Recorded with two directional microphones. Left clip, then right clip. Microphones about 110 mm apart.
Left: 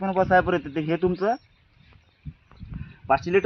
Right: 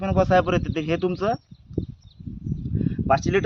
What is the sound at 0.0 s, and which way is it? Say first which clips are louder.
A man's voice: even; 35° right (ahead or behind).